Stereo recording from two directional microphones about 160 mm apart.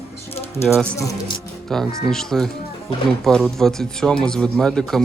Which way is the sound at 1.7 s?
Centre (ahead or behind).